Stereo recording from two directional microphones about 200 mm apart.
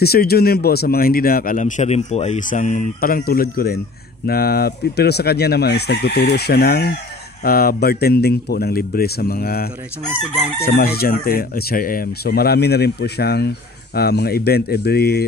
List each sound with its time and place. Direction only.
0.0 s a man's voice: 50° left (ahead or behind)